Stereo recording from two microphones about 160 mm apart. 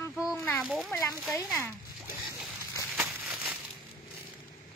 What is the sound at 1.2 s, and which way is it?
Speech, 15° left (ahead or behind).